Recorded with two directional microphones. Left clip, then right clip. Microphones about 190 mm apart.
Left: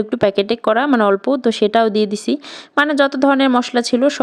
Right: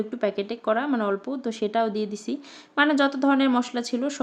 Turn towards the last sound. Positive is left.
turn(degrees=45)  # may be behind; listen again after turning